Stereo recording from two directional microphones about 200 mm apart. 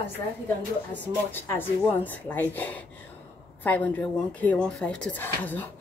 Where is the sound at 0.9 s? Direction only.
10° left (ahead or behind).